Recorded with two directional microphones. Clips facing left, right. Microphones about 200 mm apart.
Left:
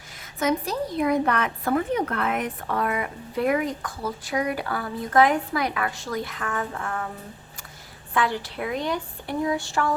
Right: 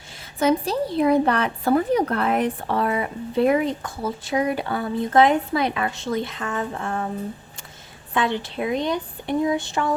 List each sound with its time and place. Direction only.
0.3 s speech: 30° right (ahead or behind)
8.1 s speech: 20° right (ahead or behind)